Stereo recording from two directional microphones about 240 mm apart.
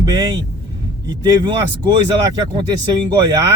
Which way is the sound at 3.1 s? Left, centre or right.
Centre.